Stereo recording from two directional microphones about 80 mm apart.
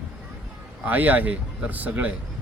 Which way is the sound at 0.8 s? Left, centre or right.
Right.